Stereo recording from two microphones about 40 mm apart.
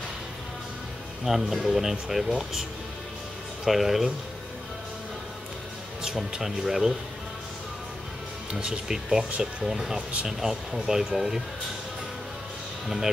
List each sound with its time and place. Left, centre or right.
1.2 s speech: centre
3.6 s speech: centre
6.4 s speech: centre
8.5 s speech: right
8.8 s speech: centre
12.8 s speech: centre